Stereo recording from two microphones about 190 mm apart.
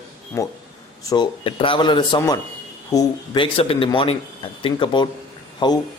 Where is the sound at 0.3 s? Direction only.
15° left (ahead or behind).